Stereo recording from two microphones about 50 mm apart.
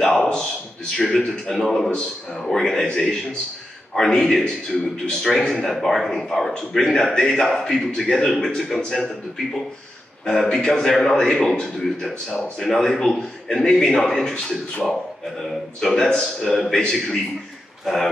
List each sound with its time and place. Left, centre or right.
0.0 s a sound: centre
1.1 s a man's voice: centre
10.2 s a man's voice: centre
15.8 s a man's voice: centre
17.9 s speech: centre